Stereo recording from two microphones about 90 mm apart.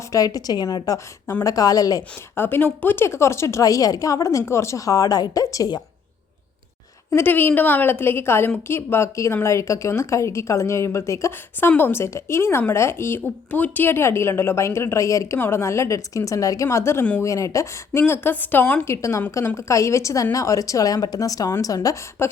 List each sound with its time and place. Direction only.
0.1 s a woman's voice: 40° left (ahead or behind)
2.3 s a woman's voice: 25° left (ahead or behind); by 5.7 s 40° left (ahead or behind)
7.1 s a woman's voice: 25° left (ahead or behind); by 22.0 s 40° left (ahead or behind)